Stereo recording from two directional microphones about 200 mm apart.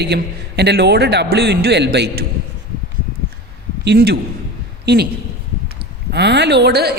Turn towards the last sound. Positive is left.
turn(degrees=-55)  # may be behind; listen again after turning